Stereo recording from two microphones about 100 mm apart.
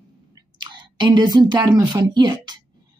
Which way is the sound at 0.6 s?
50° right (ahead or behind).